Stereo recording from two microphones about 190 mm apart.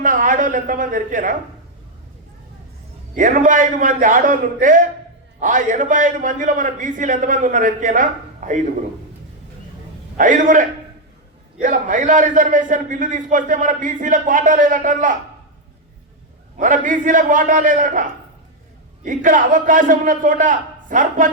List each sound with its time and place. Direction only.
0.0 s a man's voice: 45° right (ahead or behind)
3.2 s a man's voice: 45° right (ahead or behind)
10.2 s a man's voice: 45° right (ahead or behind)
16.6 s a man's voice: 45° right (ahead or behind)